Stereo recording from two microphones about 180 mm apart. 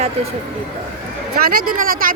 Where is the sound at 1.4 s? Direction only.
50° right (ahead or behind).